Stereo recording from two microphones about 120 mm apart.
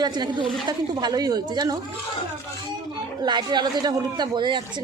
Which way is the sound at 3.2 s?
35° right (ahead or behind).